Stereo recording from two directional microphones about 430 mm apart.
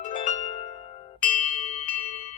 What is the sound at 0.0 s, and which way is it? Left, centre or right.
Harp, centre.